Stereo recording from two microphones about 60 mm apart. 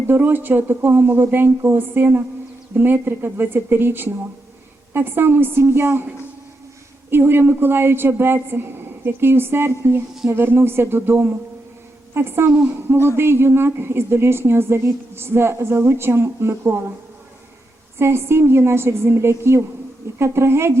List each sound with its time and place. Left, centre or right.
0.1 s a man's voice: right
7.1 s a man's voice: right
17.9 s a woman's voice: right